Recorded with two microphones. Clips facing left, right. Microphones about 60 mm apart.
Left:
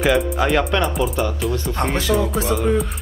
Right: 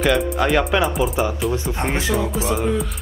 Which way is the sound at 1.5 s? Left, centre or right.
Centre.